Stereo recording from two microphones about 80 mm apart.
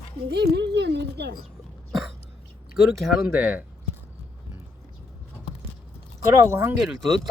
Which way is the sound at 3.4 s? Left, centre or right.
Centre.